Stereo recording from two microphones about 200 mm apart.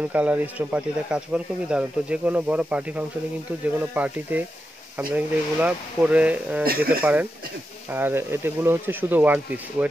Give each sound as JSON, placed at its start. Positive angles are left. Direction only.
{"t": 0.1, "sound": "speech", "side_deg": -5}
{"t": 6.6, "sound": "speech", "side_deg": -50}
{"t": 7.0, "sound": "speech", "side_deg": -10}